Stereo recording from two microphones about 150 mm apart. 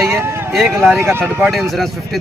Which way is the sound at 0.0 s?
15° right (ahead or behind).